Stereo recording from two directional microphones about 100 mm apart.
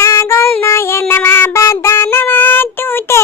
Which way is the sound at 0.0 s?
25° left (ahead or behind).